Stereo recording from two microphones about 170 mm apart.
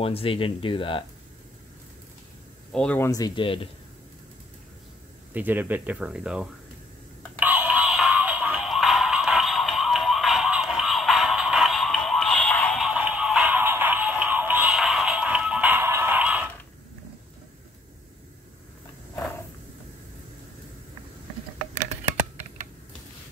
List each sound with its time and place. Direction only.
0.0 s speech: 35° left (ahead or behind)
2.7 s speech: 5° left (ahead or behind)
3.1 s speech: 25° left (ahead or behind)
5.3 s speech: 10° right (ahead or behind)
7.3 s music: 10° right (ahead or behind)